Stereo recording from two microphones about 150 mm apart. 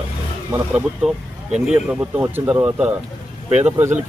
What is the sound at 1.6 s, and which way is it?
Speech, 5° right (ahead or behind).